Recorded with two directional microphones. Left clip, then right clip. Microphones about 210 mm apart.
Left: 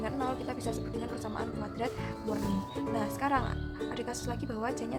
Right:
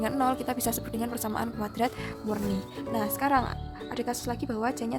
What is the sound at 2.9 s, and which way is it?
Speech, 35° right (ahead or behind).